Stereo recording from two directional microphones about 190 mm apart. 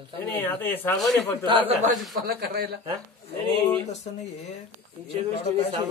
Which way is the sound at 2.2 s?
55° right (ahead or behind).